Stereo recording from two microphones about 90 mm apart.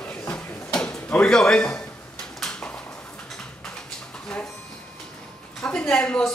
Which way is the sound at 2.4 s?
5° left (ahead or behind).